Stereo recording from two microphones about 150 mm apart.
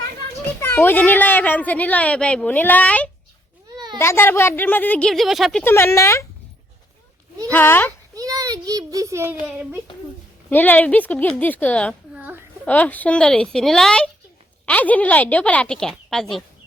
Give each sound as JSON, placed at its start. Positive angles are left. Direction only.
{"t": 0.6, "sound": "speech", "side_deg": 15}
{"t": 5.6, "sound": "speech", "side_deg": 15}
{"t": 7.5, "sound": "speech", "side_deg": 15}
{"t": 8.1, "sound": "a sound", "side_deg": -25}
{"t": 10.5, "sound": "speech", "side_deg": 10}
{"t": 12.1, "sound": "a sound", "side_deg": -10}
{"t": 12.6, "sound": "speech", "side_deg": 10}